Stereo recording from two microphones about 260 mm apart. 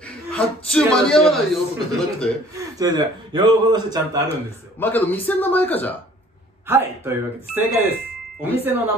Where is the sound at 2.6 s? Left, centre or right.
Centre.